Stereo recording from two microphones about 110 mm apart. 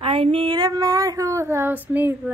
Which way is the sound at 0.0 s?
60° right (ahead or behind).